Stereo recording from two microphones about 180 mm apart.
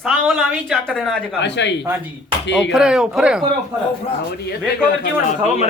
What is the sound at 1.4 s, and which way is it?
Speech, 75° left (ahead or behind).